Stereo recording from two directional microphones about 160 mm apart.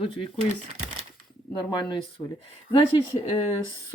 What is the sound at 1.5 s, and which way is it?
Speech, 30° left (ahead or behind).